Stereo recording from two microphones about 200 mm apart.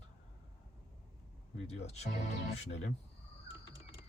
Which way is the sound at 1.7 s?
35° left (ahead or behind).